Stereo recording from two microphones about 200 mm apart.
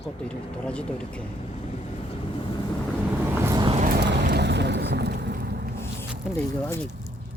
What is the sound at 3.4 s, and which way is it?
Vehicle, 20° right (ahead or behind).